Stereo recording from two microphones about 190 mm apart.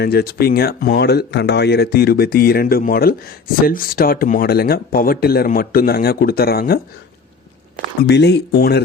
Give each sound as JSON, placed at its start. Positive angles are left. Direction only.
{"t": 0.0, "sound": "speech", "side_deg": 55}
{"t": 8.0, "sound": "speech", "side_deg": 60}